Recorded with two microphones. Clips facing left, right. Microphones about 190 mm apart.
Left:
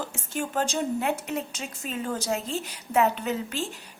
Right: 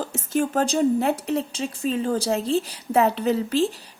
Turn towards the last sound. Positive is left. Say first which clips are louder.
# right 9 dB
turn(degrees=-35)  # may be behind; listen again after turning